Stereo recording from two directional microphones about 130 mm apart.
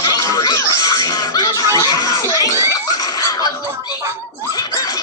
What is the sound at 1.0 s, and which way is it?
Music, 30° left (ahead or behind).